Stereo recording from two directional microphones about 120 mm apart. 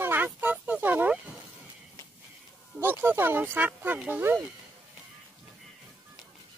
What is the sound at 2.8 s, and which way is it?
Speech, 20° right (ahead or behind).